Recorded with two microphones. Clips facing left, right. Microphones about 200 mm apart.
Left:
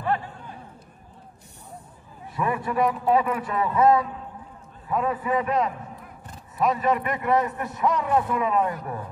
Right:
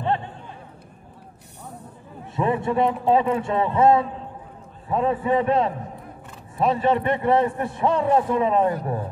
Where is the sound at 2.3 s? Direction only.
25° right (ahead or behind).